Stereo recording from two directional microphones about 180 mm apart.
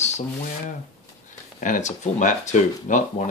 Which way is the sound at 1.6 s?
40° left (ahead or behind).